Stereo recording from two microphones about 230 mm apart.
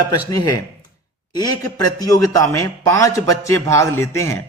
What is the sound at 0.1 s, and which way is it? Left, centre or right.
Speech, centre.